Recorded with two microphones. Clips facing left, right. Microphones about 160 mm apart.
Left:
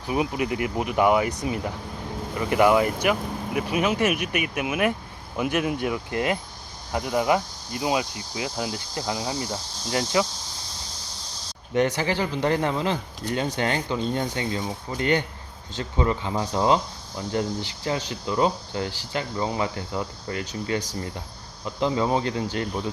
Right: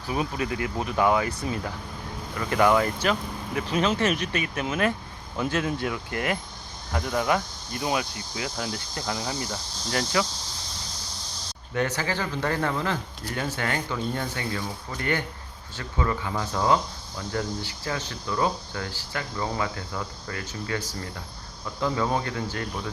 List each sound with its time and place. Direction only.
0.1 s speech: 20° left (ahead or behind)
11.7 s speech: 20° left (ahead or behind)